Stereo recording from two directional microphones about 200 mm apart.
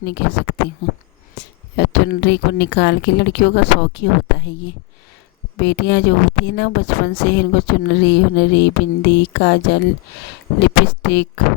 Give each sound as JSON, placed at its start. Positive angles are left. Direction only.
{"t": 0.0, "sound": "speech", "side_deg": 55}